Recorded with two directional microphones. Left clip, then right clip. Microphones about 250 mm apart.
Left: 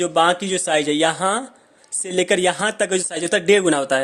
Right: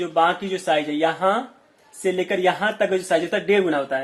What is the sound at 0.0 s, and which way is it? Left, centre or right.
Speech, left.